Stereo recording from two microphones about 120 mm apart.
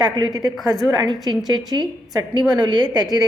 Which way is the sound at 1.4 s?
35° right (ahead or behind).